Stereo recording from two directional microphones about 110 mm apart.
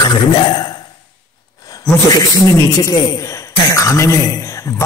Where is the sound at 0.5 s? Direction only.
40° left (ahead or behind).